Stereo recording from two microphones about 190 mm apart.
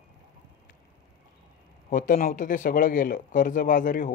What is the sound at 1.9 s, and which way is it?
Speech, 45° left (ahead or behind).